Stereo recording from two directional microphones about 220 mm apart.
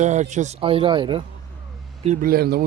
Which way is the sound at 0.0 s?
30° right (ahead or behind).